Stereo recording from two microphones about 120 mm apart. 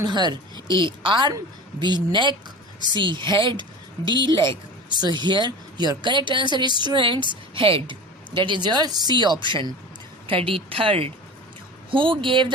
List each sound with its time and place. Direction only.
0.0 s speech: 40° right (ahead or behind)